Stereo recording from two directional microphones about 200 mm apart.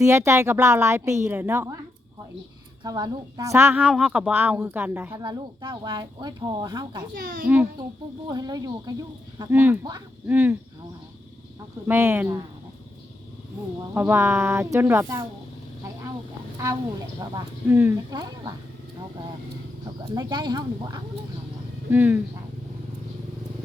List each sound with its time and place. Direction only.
0.0 s a woman's voice: 15° right (ahead or behind)
2.8 s a woman's voice: 20° right (ahead or behind)
5.2 s speech: 20° right (ahead or behind)
7.1 s a child's voice: 45° right (ahead or behind)
7.4 s a woman's voice: 10° right (ahead or behind)
8.3 s a woman's voice: 20° right (ahead or behind)
11.9 s a woman's voice: 10° right (ahead or behind)
13.9 s a woman's voice: 10° right (ahead or behind)
17.2 s a woman's voice: 20° right (ahead or behind)
20.1 s speech: 20° right (ahead or behind)
21.8 s a woman's voice: 10° right (ahead or behind)